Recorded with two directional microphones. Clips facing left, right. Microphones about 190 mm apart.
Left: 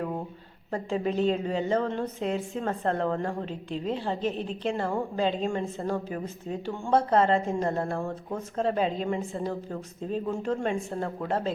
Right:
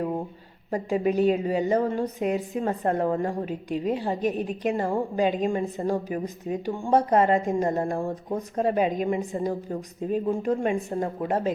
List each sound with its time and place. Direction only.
0.7 s a woman's voice: 10° right (ahead or behind)